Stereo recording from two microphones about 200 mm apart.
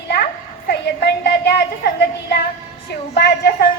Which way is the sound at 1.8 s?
55° left (ahead or behind).